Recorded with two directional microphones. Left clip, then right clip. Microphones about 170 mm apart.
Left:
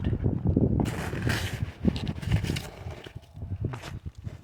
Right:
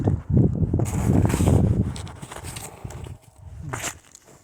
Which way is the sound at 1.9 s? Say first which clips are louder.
Left 6 dB; 5° left (ahead or behind).